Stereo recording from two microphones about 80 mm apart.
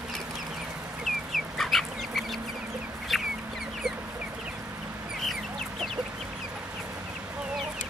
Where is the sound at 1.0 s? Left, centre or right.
Centre.